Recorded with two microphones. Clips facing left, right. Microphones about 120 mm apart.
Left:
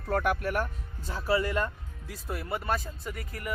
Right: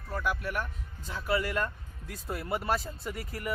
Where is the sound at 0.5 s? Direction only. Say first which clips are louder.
Left 4 dB; 40° left (ahead or behind).